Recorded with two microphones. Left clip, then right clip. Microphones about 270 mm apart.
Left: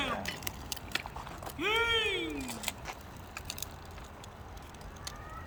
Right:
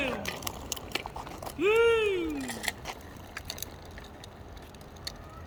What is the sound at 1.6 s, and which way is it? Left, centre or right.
Speech, left.